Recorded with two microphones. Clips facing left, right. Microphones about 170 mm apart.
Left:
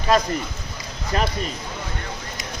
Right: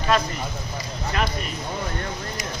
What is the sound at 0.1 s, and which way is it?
Speech, 40° left (ahead or behind).